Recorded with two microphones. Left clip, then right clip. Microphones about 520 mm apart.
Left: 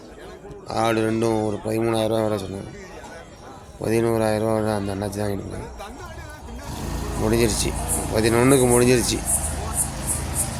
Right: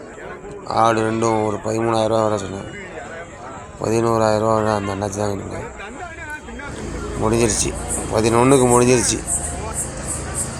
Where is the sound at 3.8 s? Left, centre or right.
Left.